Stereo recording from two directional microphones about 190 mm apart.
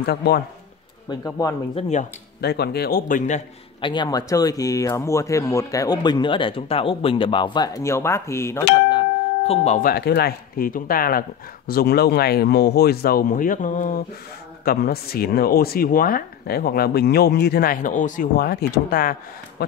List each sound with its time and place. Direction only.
0.0 s speech: 55° left (ahead or behind)
1.0 s speech: 20° left (ahead or behind)
1.8 s speech: 35° left (ahead or behind)
2.4 s speech: 60° left (ahead or behind); by 3.4 s 40° left (ahead or behind)
3.8 s speech: 25° left (ahead or behind)
8.9 s music: 30° left (ahead or behind)
9.8 s speech: 55° left (ahead or behind)
14.6 s speech: 55° left (ahead or behind)